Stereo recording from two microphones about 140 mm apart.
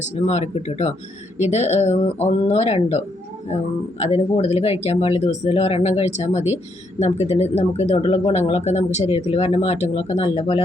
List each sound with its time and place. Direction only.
0.0 s speech: 55° left (ahead or behind)
4.0 s speech: 50° left (ahead or behind)